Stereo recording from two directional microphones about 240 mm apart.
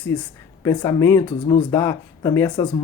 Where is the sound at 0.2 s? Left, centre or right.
Centre.